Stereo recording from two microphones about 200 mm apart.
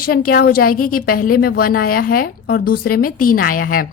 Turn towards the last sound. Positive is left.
turn(degrees=45)  # may be behind; listen again after turning